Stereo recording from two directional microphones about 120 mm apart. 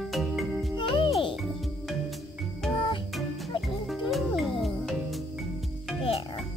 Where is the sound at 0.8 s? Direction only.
45° left (ahead or behind).